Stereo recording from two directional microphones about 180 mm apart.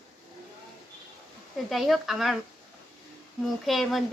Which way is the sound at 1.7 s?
Centre (ahead or behind).